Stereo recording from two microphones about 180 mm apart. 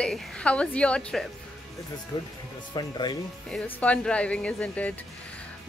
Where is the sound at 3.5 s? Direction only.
5° left (ahead or behind).